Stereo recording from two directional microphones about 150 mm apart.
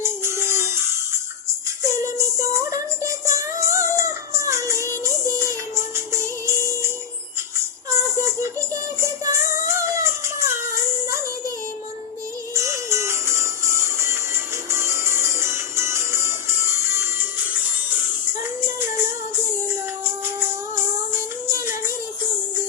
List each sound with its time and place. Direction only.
0.0 s music: 15° right (ahead or behind)
12.5 s music: 20° right (ahead or behind)
19.5 s music: 15° right (ahead or behind)